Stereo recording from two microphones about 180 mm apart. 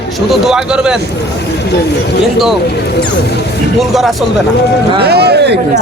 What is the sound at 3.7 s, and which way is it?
Speech, centre (ahead or behind).